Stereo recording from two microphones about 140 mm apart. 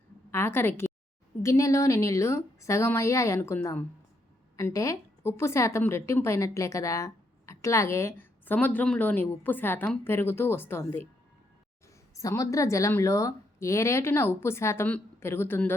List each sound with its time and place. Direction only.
0.3 s a woman's voice: 15° left (ahead or behind)
12.1 s a woman's voice: 25° left (ahead or behind)